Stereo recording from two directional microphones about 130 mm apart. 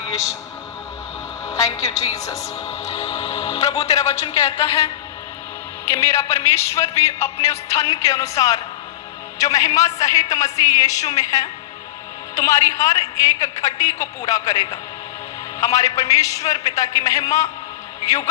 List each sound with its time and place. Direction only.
2.1 s a man's voice: 25° left (ahead or behind)
2.8 s music: 55° left (ahead or behind)
3.5 s a man's voice: 30° left (ahead or behind)
4.2 s a woman's voice: 50° left (ahead or behind)
5.8 s a man's voice: 20° left (ahead or behind)